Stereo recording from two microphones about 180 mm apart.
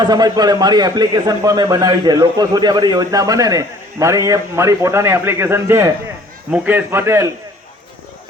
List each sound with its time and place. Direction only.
0.0 s a man's voice: 25° right (ahead or behind)